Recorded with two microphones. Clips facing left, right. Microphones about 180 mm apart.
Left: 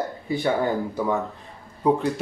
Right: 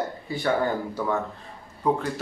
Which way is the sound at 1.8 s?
20° left (ahead or behind).